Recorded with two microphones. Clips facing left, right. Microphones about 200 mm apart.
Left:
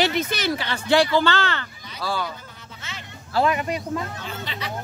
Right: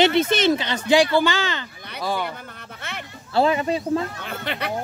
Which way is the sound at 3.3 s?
25° right (ahead or behind).